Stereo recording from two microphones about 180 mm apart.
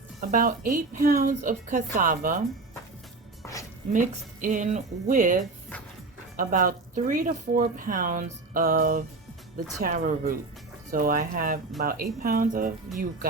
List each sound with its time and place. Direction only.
0.2 s a woman's voice: 50° right (ahead or behind)
3.4 s music: 15° left (ahead or behind)
3.9 s a woman's voice: 45° right (ahead or behind)